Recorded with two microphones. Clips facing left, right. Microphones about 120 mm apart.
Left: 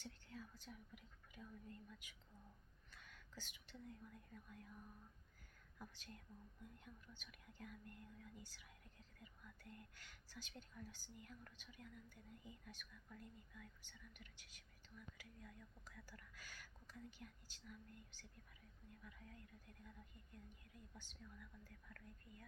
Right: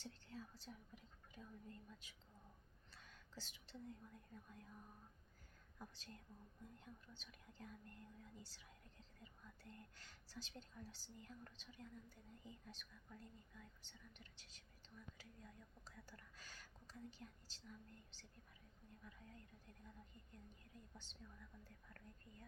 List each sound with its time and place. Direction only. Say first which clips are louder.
0.0 s speech: right 1 dB; 30° right (ahead or behind)
5.8 s speech: even; 30° right (ahead or behind)
20.9 s speech: left 1 dB; 30° right (ahead or behind)